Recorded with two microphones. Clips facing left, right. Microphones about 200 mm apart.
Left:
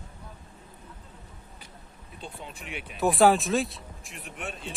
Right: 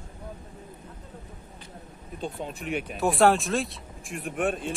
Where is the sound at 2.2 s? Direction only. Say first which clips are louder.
Right 8 dB; 45° right (ahead or behind).